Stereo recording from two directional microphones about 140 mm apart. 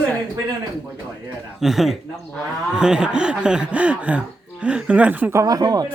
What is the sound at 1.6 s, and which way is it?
A man's voice, centre (ahead or behind).